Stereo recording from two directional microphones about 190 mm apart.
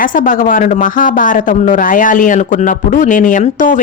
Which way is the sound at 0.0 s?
45° left (ahead or behind).